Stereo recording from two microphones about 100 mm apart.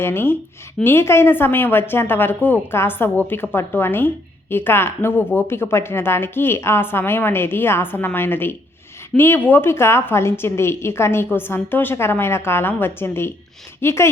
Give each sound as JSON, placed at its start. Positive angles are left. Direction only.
{"t": 0.0, "sound": "a woman's voice", "side_deg": 25}